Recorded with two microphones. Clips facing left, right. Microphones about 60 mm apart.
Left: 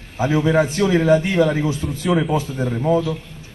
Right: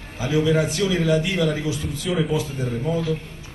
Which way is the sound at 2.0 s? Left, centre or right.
Left.